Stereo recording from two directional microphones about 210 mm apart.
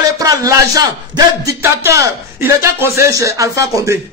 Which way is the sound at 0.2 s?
15° right (ahead or behind).